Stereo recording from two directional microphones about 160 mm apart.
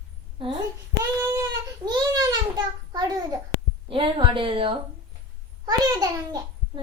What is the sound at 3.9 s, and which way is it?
Speech, 35° right (ahead or behind).